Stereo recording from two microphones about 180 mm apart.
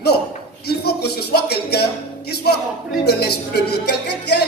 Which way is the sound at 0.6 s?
65° left (ahead or behind).